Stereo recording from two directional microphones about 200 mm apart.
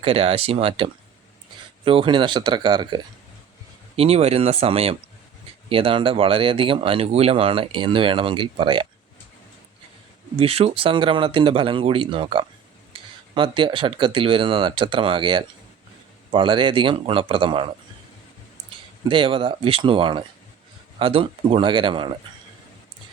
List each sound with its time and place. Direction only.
0.0 s speech: 30° right (ahead or behind)
10.3 s speech: 30° right (ahead or behind)
19.0 s speech: 25° right (ahead or behind)